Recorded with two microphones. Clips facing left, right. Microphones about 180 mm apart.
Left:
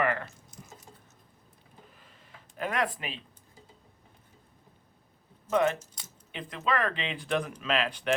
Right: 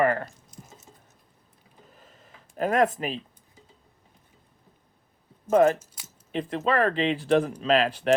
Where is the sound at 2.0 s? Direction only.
40° right (ahead or behind).